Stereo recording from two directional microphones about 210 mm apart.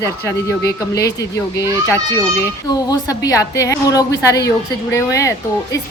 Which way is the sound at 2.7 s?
15° left (ahead or behind).